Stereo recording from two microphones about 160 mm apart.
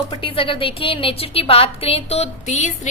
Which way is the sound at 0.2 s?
35° left (ahead or behind).